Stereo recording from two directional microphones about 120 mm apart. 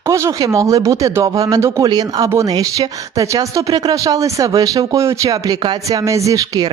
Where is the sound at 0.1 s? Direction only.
25° right (ahead or behind).